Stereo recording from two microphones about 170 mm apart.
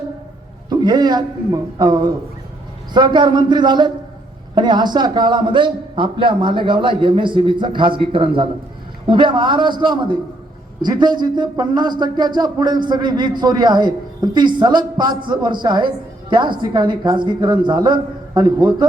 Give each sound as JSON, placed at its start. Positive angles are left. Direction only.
{"t": 0.7, "sound": "speech", "side_deg": -25}